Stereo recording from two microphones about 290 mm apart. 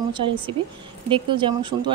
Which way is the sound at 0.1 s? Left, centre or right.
Centre.